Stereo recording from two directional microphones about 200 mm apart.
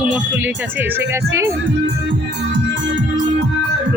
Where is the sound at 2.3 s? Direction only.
65° right (ahead or behind).